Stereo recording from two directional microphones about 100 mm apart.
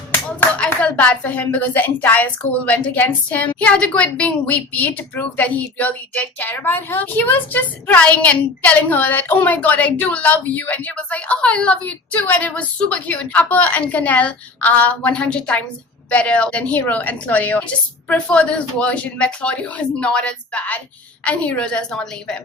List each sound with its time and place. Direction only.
0.3 s a woman's voice: 15° left (ahead or behind)